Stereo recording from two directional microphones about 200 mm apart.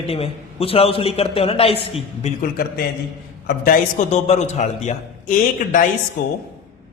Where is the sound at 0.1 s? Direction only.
30° left (ahead or behind).